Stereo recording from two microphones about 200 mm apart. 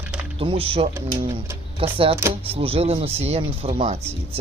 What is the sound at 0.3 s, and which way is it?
Speech, 30° right (ahead or behind).